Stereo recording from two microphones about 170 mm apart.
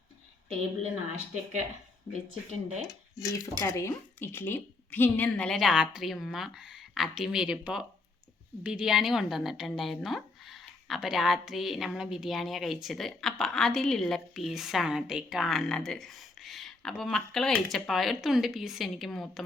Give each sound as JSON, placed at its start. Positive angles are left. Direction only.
{"t": 2.5, "sound": "speech", "side_deg": -45}
{"t": 3.2, "sound": "a woman's voice", "side_deg": 20}